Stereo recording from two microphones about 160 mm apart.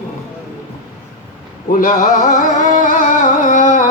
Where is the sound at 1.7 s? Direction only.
55° left (ahead or behind).